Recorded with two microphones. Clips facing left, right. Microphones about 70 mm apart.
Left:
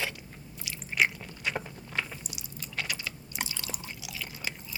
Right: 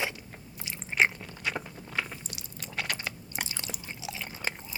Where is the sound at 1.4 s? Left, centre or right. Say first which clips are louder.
Even; centre.